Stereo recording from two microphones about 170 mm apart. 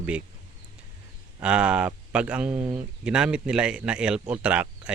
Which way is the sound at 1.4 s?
5° right (ahead or behind).